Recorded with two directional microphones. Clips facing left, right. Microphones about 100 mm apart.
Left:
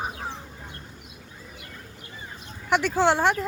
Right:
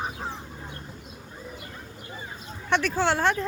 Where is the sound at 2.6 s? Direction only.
15° left (ahead or behind).